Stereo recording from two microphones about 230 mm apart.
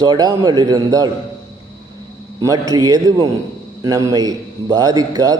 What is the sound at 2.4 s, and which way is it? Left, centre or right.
A man's voice, centre.